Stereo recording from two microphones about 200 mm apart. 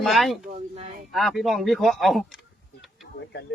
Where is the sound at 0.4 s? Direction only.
30° right (ahead or behind).